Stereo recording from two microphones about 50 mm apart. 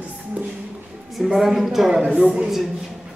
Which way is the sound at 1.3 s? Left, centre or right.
Centre.